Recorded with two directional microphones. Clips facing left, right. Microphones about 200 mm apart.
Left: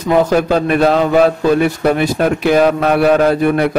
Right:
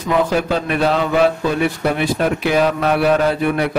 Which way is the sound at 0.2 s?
45° left (ahead or behind).